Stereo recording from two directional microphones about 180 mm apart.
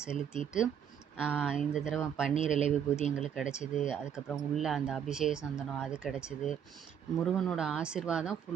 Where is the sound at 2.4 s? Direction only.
40° left (ahead or behind).